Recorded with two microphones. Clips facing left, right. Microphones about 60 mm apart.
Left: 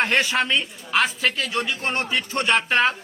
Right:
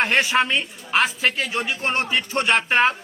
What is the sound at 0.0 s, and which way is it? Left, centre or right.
Speech, right.